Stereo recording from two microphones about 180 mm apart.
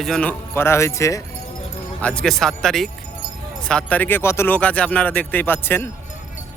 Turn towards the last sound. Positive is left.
turn(degrees=10)  # may be behind; listen again after turning